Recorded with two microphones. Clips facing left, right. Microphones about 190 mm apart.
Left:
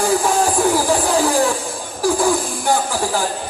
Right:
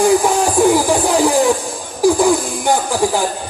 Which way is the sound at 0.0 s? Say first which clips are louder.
Right 4 dB; 15° right (ahead or behind).